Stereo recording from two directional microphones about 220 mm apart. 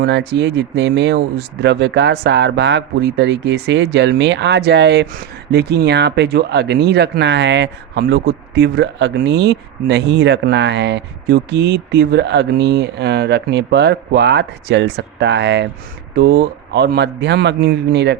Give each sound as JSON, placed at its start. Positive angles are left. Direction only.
{"t": 0.0, "sound": "speech", "side_deg": -50}